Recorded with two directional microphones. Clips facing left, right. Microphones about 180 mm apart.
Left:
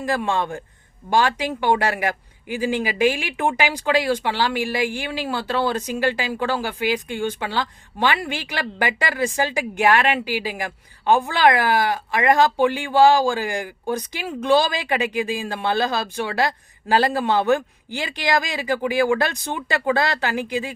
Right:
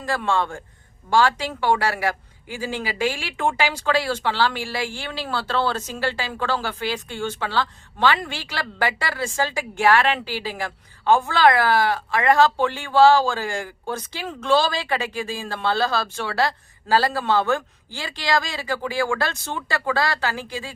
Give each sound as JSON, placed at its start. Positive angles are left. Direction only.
{"t": 0.0, "sound": "speech", "side_deg": 15}